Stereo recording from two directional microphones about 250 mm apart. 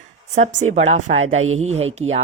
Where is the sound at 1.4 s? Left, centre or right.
Right.